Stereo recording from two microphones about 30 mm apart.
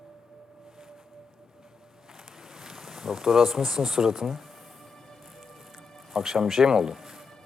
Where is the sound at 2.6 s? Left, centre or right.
Centre.